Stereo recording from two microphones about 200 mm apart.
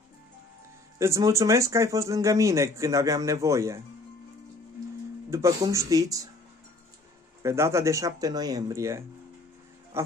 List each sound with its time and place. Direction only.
0.9 s speech: 15° right (ahead or behind)
5.3 s speech: 15° right (ahead or behind)
7.4 s speech: 15° right (ahead or behind)